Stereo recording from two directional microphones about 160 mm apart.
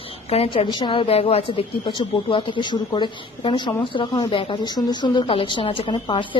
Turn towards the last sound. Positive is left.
turn(degrees=30)  # may be behind; listen again after turning